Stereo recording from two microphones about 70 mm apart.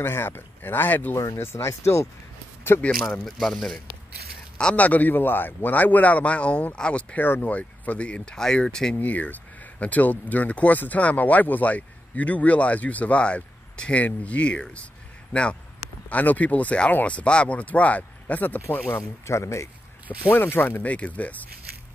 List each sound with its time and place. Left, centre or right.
0.0 s speech: left
1.1 s speech: left
1.4 s speech: left
3.3 s speech: centre
4.6 s speech: centre
8.9 s speech: left
20.2 s speech: left